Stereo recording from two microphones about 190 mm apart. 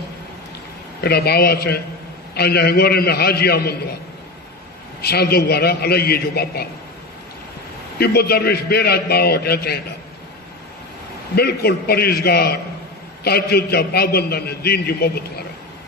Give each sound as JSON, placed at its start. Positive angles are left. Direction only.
{"t": 1.0, "sound": "a man's voice", "side_deg": 55}
{"t": 5.0, "sound": "a man's voice", "side_deg": 55}
{"t": 8.0, "sound": "a man's voice", "side_deg": 55}
{"t": 11.3, "sound": "a man's voice", "side_deg": 55}